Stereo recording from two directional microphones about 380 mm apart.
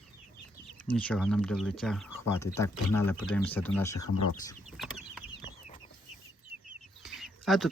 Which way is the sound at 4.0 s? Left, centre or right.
Left.